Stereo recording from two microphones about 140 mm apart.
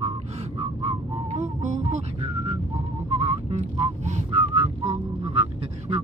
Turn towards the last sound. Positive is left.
turn(degrees=-45)  # may be behind; listen again after turning